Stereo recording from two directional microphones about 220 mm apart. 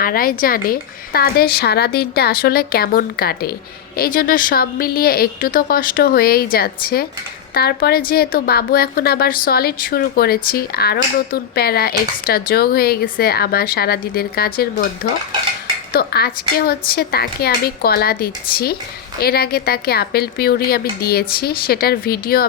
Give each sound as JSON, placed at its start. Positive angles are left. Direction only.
{"t": 0.0, "sound": "a woman's voice", "side_deg": 40}
{"t": 15.9, "sound": "a woman's voice", "side_deg": 45}